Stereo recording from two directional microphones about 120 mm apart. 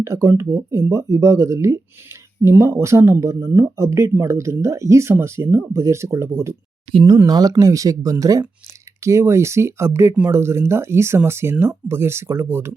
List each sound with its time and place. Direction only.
0.0 s speech: 25° right (ahead or behind)
6.9 s speech: 40° right (ahead or behind); by 12.7 s 20° right (ahead or behind)